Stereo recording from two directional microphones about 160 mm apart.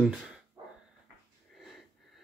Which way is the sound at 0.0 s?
5° right (ahead or behind).